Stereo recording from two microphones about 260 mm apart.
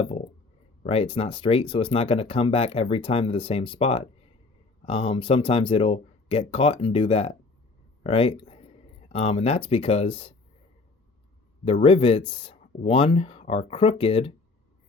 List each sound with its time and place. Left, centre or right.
0.8 s speech: left
11.6 s speech: left